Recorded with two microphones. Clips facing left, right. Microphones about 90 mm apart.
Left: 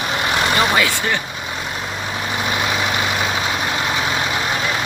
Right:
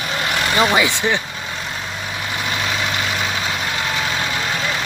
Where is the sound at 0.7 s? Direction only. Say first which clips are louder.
Right 1 dB; 20° right (ahead or behind).